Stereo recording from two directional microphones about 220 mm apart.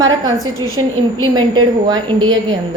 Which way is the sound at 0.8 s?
15° right (ahead or behind).